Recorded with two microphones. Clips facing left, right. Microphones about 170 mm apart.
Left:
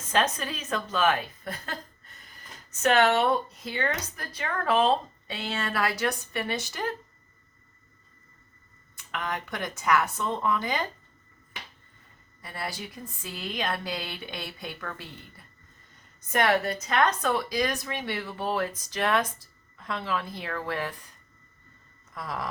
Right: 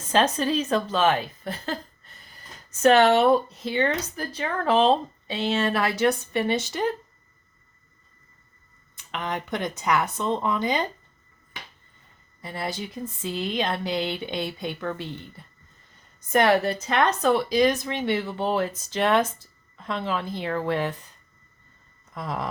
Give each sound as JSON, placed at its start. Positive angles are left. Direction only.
{"t": 0.1, "sound": "a woman's voice", "side_deg": -30}
{"t": 9.1, "sound": "speech", "side_deg": -20}
{"t": 12.4, "sound": "speech", "side_deg": -20}
{"t": 16.3, "sound": "a woman's voice", "side_deg": -35}
{"t": 22.1, "sound": "a sound", "side_deg": -25}